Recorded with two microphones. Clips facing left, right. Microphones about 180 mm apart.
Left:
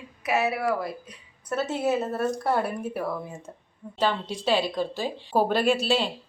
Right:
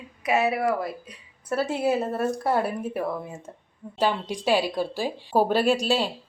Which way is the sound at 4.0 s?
10° right (ahead or behind).